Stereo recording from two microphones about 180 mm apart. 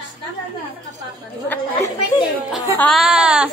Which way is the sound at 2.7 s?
Centre (ahead or behind).